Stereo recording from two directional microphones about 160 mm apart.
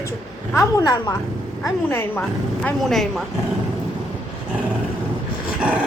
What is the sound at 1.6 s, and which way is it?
Speech, 15° left (ahead or behind).